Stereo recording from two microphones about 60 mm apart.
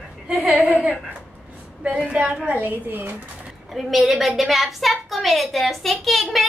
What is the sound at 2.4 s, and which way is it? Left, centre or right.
Speech, right.